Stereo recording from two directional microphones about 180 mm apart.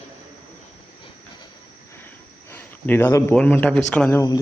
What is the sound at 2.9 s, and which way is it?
A man's voice, 15° left (ahead or behind).